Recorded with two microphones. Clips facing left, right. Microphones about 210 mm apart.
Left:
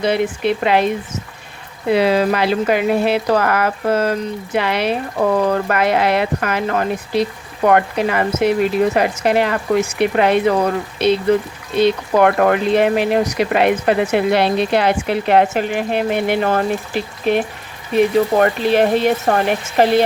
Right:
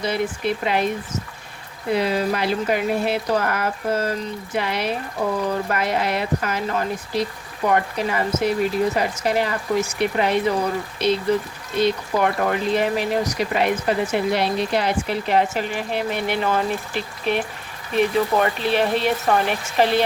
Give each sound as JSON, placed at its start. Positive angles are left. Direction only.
{"t": 0.0, "sound": "speech", "side_deg": 75}
{"t": 1.9, "sound": "speech", "side_deg": 80}
{"t": 12.1, "sound": "speech", "side_deg": 65}
{"t": 16.0, "sound": "speech", "side_deg": 50}
{"t": 18.3, "sound": "speech", "side_deg": 50}